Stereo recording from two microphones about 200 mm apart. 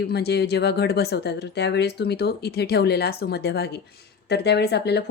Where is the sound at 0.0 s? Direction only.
55° left (ahead or behind).